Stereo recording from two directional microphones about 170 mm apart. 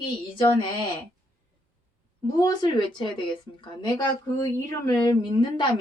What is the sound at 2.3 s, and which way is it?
A woman's voice, 20° left (ahead or behind).